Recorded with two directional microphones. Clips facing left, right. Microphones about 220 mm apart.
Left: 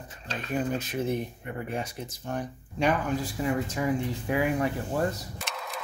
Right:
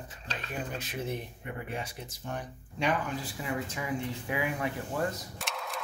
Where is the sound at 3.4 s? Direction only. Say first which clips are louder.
Left 7 dB; 45° left (ahead or behind).